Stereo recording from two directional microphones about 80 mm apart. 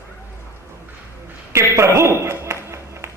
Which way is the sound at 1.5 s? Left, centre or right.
Right.